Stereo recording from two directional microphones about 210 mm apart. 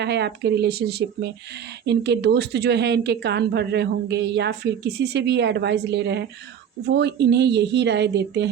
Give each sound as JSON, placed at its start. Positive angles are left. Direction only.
{"t": 0.0, "sound": "a woman's voice", "side_deg": -55}